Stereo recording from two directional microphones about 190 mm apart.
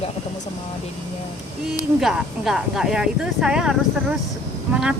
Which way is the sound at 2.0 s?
Centre (ahead or behind).